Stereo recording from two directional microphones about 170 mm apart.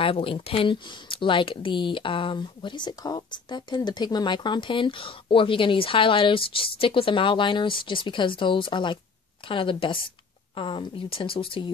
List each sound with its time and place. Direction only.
0.0 s speech: 30° left (ahead or behind)